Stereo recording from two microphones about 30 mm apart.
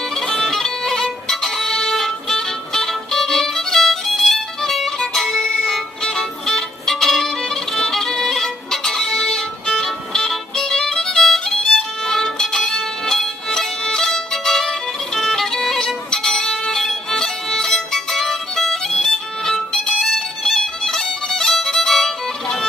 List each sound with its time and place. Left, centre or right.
0.4 s music: centre
4.7 s violin: centre
6.4 s music: centre
20.0 s music: centre